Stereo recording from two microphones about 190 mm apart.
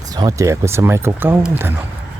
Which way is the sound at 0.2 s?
15° right (ahead or behind).